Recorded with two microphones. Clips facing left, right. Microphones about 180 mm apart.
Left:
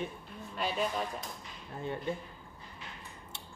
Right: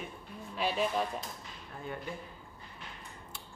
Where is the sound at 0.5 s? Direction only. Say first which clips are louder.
Right 2 dB; 5° right (ahead or behind).